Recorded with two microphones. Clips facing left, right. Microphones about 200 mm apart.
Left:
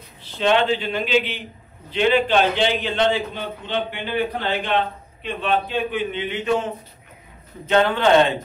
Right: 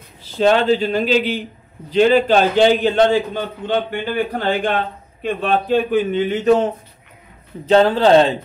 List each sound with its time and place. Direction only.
0.2 s a man's voice: 40° right (ahead or behind)